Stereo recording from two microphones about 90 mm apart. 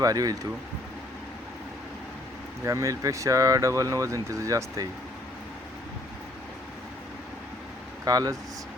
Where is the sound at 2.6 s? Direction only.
35° right (ahead or behind).